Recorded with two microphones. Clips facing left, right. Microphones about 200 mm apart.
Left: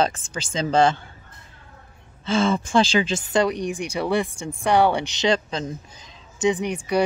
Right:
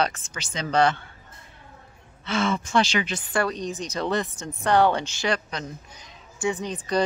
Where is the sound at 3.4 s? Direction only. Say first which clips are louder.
Left 4 dB; 15° left (ahead or behind).